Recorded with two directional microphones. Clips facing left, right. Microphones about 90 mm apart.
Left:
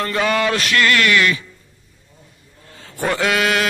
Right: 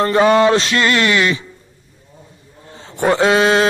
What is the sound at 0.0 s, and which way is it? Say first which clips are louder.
A man's voice: right 7 dB; 30° right (ahead or behind).